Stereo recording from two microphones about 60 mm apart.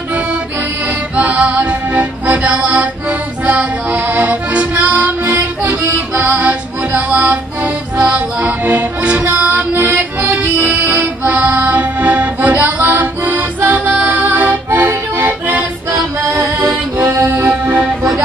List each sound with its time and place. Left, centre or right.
0.8 s accordion: right
5.9 s music: right
8.5 s accordion: right
9.4 s music: right
14.0 s accordion: right
16.9 s music: right